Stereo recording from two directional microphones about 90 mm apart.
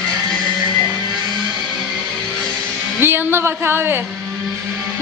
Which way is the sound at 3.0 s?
25° right (ahead or behind).